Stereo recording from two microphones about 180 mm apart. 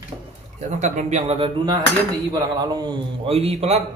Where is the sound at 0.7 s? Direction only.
40° right (ahead or behind); by 3.0 s 20° right (ahead or behind).